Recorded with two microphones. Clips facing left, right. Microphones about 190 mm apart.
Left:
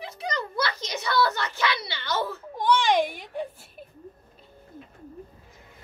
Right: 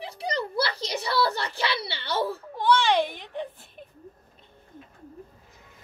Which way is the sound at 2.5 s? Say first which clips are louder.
Even; 15° left (ahead or behind).